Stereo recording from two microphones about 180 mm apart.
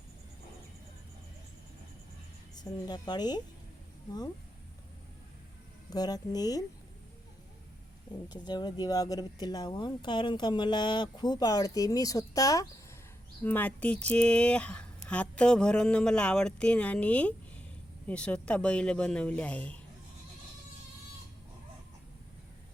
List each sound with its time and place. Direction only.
2.6 s speech: 20° left (ahead or behind)
5.9 s speech: 20° left (ahead or behind)
8.3 s speech: 25° left (ahead or behind); by 19.8 s 5° left (ahead or behind)